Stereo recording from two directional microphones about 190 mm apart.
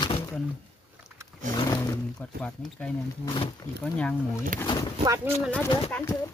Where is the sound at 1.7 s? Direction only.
15° left (ahead or behind).